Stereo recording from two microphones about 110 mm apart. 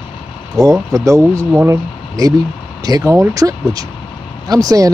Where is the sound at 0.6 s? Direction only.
35° right (ahead or behind).